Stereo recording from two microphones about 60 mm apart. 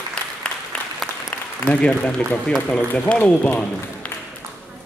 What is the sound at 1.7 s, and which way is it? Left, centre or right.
Speech, centre.